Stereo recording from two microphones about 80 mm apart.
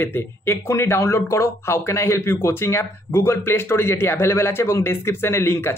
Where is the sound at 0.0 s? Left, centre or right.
Left.